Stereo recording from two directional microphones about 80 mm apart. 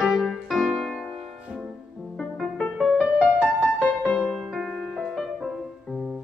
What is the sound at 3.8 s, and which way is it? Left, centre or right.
Music, centre.